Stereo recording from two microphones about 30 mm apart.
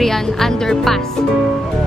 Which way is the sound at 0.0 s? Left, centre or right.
Centre.